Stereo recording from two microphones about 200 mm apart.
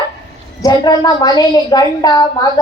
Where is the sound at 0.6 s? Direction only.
20° left (ahead or behind).